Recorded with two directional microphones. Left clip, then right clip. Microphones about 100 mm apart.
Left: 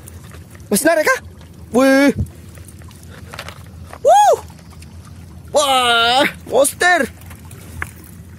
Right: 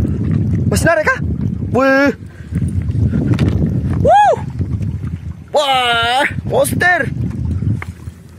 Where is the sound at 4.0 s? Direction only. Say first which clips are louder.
Right 1 dB; 25° left (ahead or behind).